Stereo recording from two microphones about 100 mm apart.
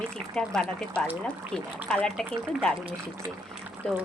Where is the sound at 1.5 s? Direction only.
5° left (ahead or behind).